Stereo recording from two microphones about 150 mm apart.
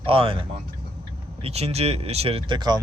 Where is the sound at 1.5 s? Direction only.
45° right (ahead or behind).